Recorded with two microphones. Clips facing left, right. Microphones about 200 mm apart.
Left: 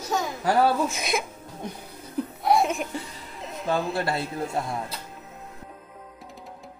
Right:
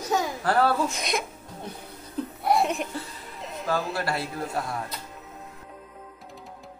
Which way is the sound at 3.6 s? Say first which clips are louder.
Left 2 dB; 25° left (ahead or behind).